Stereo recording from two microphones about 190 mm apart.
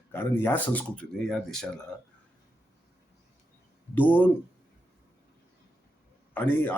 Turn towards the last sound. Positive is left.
turn(degrees=10)  # may be behind; listen again after turning